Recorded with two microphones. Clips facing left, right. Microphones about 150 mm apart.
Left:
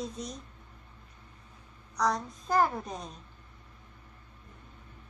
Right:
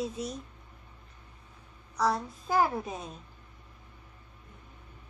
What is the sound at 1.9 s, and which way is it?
Speech, 5° right (ahead or behind).